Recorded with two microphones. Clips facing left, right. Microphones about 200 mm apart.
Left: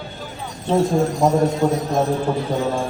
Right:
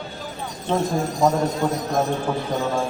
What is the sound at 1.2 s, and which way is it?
Speech, 10° left (ahead or behind).